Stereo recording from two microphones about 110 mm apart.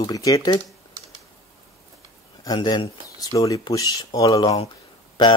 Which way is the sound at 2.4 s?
35° left (ahead or behind).